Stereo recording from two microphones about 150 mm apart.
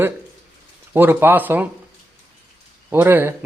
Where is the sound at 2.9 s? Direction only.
15° right (ahead or behind).